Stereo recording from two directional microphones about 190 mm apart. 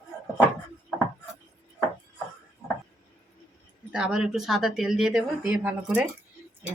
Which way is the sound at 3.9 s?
5° right (ahead or behind).